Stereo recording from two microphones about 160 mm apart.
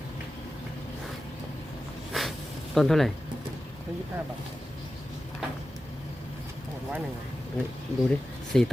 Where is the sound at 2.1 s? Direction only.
Centre (ahead or behind).